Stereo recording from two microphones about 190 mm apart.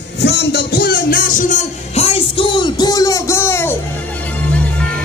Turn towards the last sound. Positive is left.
turn(degrees=10)  # may be behind; listen again after turning